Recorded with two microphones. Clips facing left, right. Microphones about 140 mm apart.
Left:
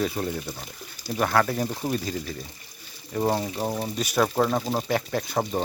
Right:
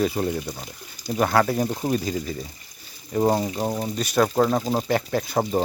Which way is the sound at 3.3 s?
Centre (ahead or behind).